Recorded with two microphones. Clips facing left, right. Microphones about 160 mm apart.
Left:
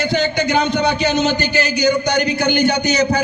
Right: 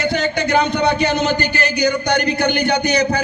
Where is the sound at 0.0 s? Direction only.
55° right (ahead or behind).